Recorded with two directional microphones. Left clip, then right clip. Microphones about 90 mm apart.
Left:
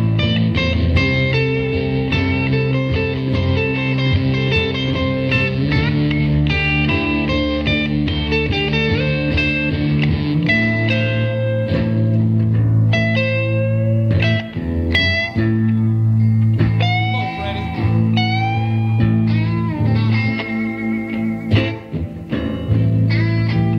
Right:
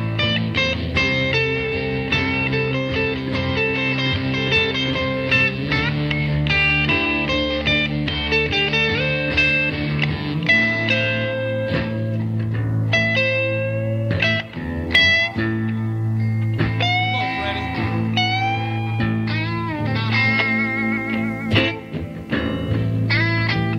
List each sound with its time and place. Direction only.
0.2 s music: 15° left (ahead or behind)
0.9 s music: 35° left (ahead or behind)
5.3 s music: 30° left (ahead or behind)
6.3 s music: 20° left (ahead or behind)
10.4 s music: 35° left (ahead or behind)
12.9 s music: 25° left (ahead or behind)
14.9 s music: 35° left (ahead or behind)